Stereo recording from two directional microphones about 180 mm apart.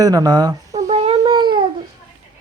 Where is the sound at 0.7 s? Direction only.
35° right (ahead or behind).